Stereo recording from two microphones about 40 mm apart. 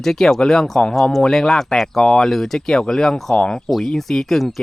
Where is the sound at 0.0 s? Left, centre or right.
Centre.